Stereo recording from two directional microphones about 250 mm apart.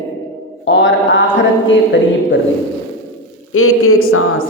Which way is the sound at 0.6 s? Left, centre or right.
Left.